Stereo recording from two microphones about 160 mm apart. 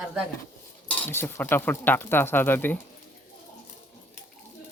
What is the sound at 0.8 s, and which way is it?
Speech, 10° left (ahead or behind).